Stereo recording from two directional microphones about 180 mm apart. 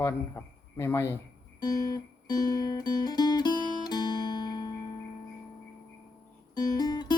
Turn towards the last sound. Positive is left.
turn(degrees=20)  # may be behind; listen again after turning